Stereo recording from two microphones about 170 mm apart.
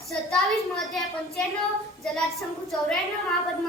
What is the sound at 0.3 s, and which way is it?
Speech, centre (ahead or behind).